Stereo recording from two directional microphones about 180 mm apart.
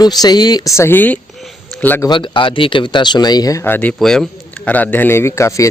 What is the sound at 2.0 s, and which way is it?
Speech, 25° left (ahead or behind).